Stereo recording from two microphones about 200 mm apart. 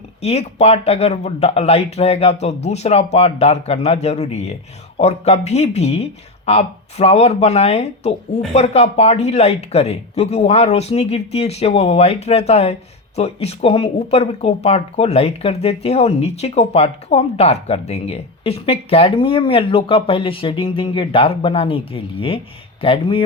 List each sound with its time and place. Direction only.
0.2 s speech: 35° left (ahead or behind)